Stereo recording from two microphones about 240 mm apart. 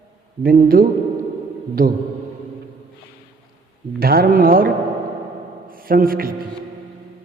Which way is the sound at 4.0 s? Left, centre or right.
Right.